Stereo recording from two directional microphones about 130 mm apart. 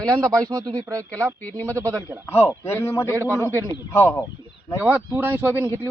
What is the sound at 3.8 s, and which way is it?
Speech, 20° left (ahead or behind).